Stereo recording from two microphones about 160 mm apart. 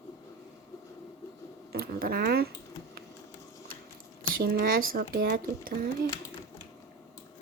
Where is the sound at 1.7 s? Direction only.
70° right (ahead or behind).